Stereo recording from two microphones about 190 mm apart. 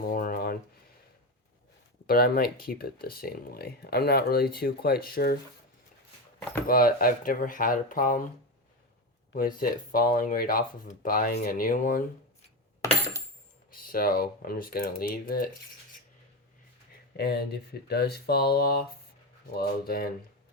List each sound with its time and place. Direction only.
0.1 s a sound: 50° left (ahead or behind)
2.0 s speech: 50° left (ahead or behind)
6.7 s speech: 50° left (ahead or behind)
9.3 s speech: 50° left (ahead or behind)
13.7 s speech: 50° left (ahead or behind)
17.2 s speech: 55° left (ahead or behind)